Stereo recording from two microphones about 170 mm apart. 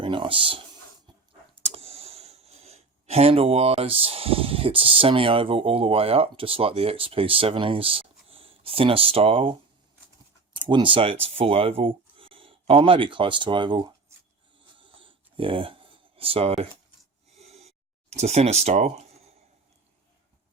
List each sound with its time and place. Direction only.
0.0 s speech: 30° right (ahead or behind)
1.6 s speech: 35° right (ahead or behind)
14.8 s a sound: 30° right (ahead or behind)
18.1 s speech: 40° right (ahead or behind)